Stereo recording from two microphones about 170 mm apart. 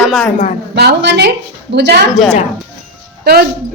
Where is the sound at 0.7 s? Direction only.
70° right (ahead or behind).